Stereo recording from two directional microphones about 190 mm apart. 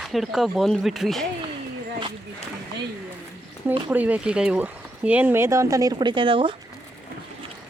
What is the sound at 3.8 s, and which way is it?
Speech, 10° right (ahead or behind).